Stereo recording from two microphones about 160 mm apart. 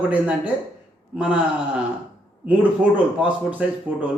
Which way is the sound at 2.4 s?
10° right (ahead or behind).